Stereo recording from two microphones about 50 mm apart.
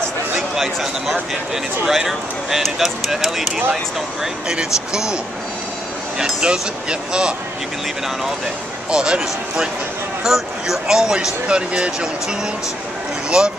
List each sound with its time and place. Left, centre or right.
0.4 s a man's voice: centre
8.9 s speech: centre